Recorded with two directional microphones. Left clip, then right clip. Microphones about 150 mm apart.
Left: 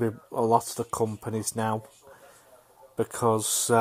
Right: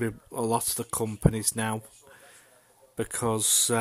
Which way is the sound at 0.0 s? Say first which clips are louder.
Left 4 dB; 20° right (ahead or behind).